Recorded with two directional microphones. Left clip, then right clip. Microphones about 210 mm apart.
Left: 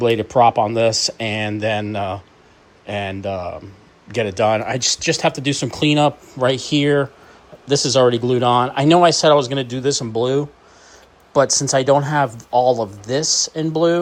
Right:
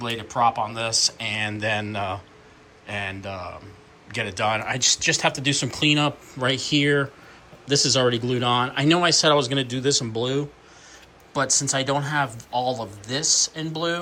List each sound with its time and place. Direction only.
0.0 s speech: 40° left (ahead or behind)